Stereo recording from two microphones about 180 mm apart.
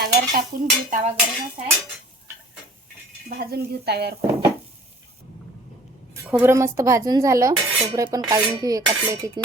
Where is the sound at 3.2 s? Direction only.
55° right (ahead or behind).